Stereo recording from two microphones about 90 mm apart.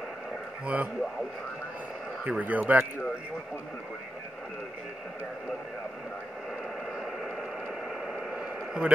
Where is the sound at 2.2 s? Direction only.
15° right (ahead or behind).